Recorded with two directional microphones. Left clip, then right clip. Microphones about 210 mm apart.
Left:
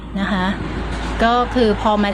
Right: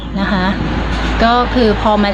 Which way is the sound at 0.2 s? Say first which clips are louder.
Right 5 dB; 15° left (ahead or behind).